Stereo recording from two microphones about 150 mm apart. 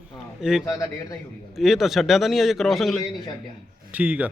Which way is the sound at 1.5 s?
Centre (ahead or behind).